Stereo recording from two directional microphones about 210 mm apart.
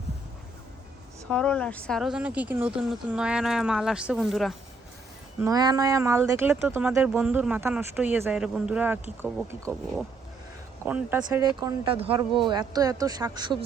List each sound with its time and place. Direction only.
1.3 s speech: 5° left (ahead or behind)
5.4 s speech: 15° right (ahead or behind)
9.6 s speech: 5° left (ahead or behind)
10.8 s speech: 10° right (ahead or behind)
11.2 s speech: 20° right (ahead or behind)